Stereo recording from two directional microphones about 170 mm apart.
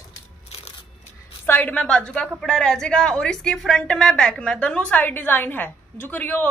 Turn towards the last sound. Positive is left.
turn(degrees=10)  # may be behind; listen again after turning